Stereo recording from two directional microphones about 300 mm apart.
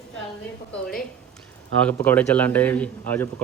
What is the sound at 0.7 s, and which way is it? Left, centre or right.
A man's voice, centre.